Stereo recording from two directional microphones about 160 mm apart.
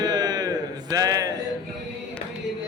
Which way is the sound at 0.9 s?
20° right (ahead or behind).